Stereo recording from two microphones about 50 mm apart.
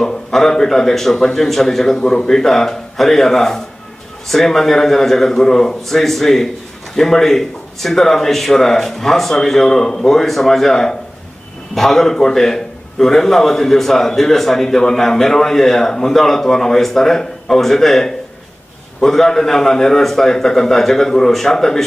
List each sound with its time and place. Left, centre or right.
0.0 s a man's voice: centre